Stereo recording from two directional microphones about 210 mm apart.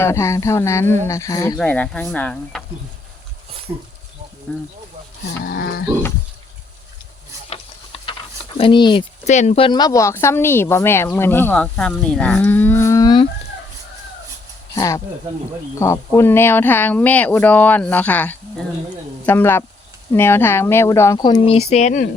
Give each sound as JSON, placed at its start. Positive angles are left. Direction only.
{"t": 0.0, "sound": "speech", "side_deg": 15}
{"t": 3.7, "sound": "speech", "side_deg": -10}
{"t": 4.5, "sound": "speech", "side_deg": 5}
{"t": 5.5, "sound": "a sound", "side_deg": 45}
{"t": 7.5, "sound": "a sound", "side_deg": 25}
{"t": 8.5, "sound": "speech", "side_deg": 25}
{"t": 9.2, "sound": "speech", "side_deg": 35}
{"t": 14.8, "sound": "speech", "side_deg": 15}